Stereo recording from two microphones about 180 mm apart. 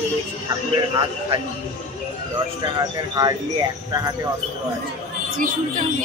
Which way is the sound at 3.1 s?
20° right (ahead or behind).